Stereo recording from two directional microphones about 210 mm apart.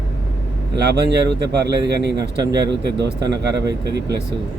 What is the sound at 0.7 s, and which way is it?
A man's voice, 50° right (ahead or behind).